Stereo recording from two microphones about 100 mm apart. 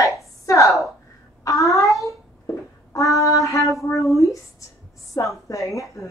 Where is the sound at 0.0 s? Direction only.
30° left (ahead or behind).